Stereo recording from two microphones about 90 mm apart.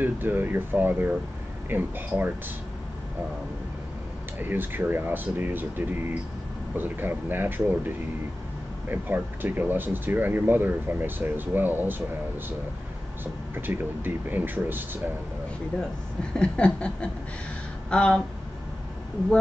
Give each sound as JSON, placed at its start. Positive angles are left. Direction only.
{"t": 0.0, "sound": "speech", "side_deg": -20}
{"t": 4.4, "sound": "speech", "side_deg": -20}
{"t": 13.2, "sound": "speech", "side_deg": -20}
{"t": 15.7, "sound": "a sound", "side_deg": 15}